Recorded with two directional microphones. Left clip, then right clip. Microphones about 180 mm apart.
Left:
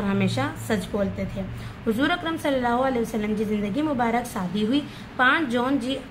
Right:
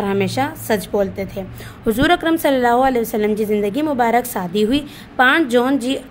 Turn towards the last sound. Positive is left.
turn(degrees=-45)  # may be behind; listen again after turning